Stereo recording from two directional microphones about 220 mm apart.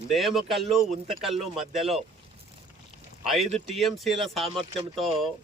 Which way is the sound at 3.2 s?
Centre (ahead or behind).